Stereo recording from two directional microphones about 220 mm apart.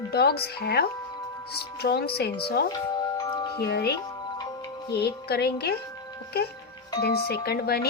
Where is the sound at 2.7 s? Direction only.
15° left (ahead or behind).